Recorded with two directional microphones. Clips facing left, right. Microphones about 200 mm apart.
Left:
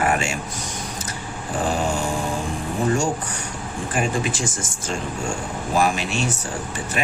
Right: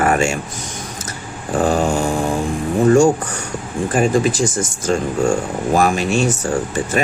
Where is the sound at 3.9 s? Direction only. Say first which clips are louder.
Right 8 dB; 40° right (ahead or behind).